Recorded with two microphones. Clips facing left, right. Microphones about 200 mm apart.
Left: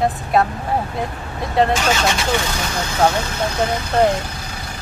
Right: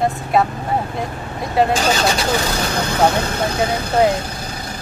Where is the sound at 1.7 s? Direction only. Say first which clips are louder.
Right 1 dB; 35° right (ahead or behind).